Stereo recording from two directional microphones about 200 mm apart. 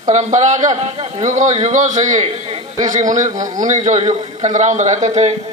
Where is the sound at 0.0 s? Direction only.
35° right (ahead or behind).